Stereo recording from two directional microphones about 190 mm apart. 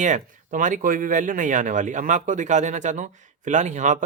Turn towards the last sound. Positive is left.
turn(degrees=-40)  # may be behind; listen again after turning